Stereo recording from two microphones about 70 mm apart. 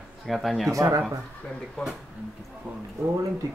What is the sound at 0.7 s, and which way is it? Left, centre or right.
Speech, right.